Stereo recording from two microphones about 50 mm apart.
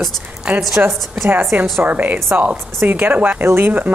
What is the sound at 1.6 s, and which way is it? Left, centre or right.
A woman's voice, right.